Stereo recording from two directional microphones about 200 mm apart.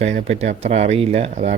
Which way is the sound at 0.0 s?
35° right (ahead or behind).